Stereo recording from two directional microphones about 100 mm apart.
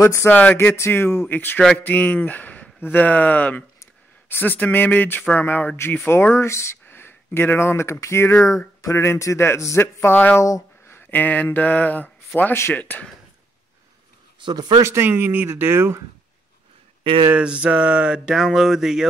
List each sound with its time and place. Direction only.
0.0 s speech: 30° left (ahead or behind)
0.3 s speech: 15° left (ahead or behind)
10.4 s a sound: 30° left (ahead or behind)
12.4 s speech: 20° left (ahead or behind)
14.4 s speech: 45° right (ahead or behind)
14.8 s speech: 25° right (ahead or behind)
17.0 s speech: 60° right (ahead or behind)
17.3 s a sound: 10° right (ahead or behind)